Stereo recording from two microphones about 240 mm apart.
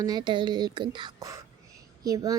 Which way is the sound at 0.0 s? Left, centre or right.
Centre.